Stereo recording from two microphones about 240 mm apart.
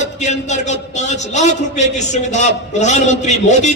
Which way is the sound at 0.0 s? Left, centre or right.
Left.